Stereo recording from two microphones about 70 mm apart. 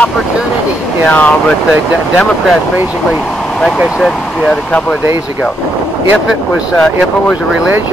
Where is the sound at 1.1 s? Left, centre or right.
Left.